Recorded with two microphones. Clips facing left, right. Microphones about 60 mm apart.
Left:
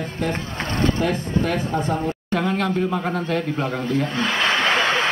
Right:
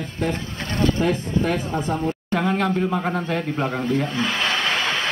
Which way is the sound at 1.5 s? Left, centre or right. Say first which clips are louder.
Left 1 dB; centre.